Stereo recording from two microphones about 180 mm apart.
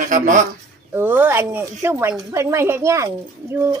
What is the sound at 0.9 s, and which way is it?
Speech, 10° right (ahead or behind).